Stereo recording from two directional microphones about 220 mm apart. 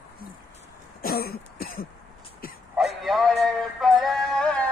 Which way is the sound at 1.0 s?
45° left (ahead or behind).